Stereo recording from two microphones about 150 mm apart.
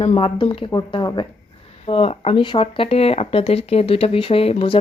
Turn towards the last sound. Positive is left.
turn(degrees=40)  # may be behind; listen again after turning